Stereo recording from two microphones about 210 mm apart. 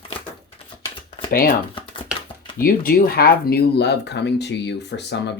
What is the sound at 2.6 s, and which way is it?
Speech, 45° left (ahead or behind).